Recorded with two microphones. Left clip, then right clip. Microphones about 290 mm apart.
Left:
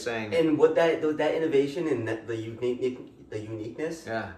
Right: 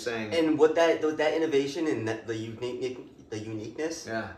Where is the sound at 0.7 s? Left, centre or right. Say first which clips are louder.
Even; right.